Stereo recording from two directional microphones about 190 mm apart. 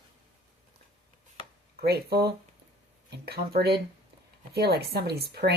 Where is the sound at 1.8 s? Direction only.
55° right (ahead or behind).